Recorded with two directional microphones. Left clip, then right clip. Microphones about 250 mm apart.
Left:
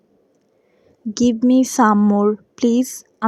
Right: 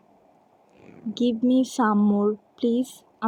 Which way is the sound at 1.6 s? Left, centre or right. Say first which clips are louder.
Left 8 dB; left.